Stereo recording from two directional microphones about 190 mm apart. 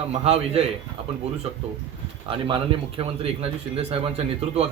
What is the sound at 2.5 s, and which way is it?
A man's voice, 30° right (ahead or behind).